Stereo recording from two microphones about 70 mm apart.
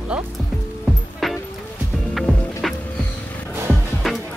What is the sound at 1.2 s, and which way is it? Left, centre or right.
Music, centre.